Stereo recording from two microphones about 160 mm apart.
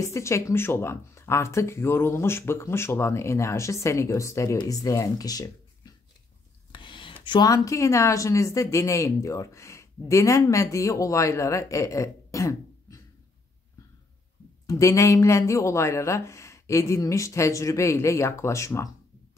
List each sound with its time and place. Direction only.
0.0 s speech: 20° left (ahead or behind)
6.7 s a sound: 30° left (ahead or behind)
7.2 s speech: 25° left (ahead or behind)
14.7 s speech: 20° left (ahead or behind)